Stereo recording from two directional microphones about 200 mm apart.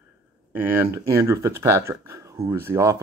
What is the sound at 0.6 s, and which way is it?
Speech, 10° right (ahead or behind).